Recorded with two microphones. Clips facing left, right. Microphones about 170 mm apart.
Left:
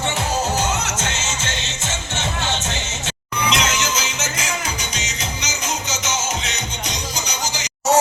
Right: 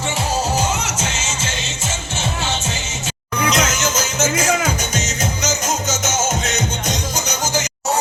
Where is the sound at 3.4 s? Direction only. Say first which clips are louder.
Right 3 dB; 45° right (ahead or behind).